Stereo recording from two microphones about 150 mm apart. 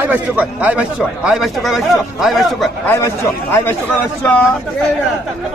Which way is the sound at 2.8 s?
15° left (ahead or behind).